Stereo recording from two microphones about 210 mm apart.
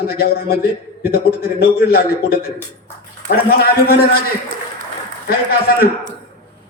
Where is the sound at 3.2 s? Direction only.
50° left (ahead or behind).